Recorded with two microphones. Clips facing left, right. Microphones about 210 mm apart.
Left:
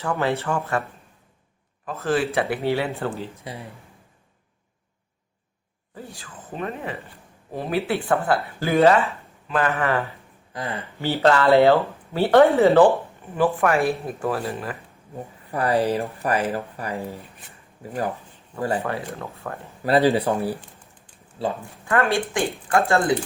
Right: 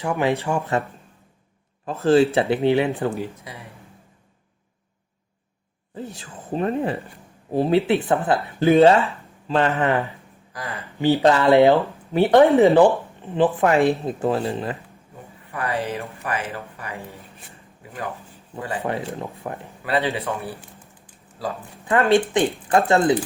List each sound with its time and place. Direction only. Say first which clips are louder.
0.0 s speech: right 2 dB; 15° right (ahead or behind)
1.8 s speech: right 7 dB; 30° right (ahead or behind)
2.6 s speech: right 5 dB; 15° right (ahead or behind)
3.5 s speech: left 4 dB; 30° left (ahead or behind)
5.9 s speech: right 5 dB; 25° right (ahead or behind)
10.5 s speech: left 3 dB; 30° left (ahead or behind)
11.0 s speech: right 2 dB; 15° right (ahead or behind)
15.5 s speech: left 5 dB; 35° left (ahead or behind)
18.8 s speech: right 2 dB; 15° right (ahead or behind)
19.8 s speech: left 5 dB; 40° left (ahead or behind)
21.8 s speech: right 4 dB; 20° right (ahead or behind)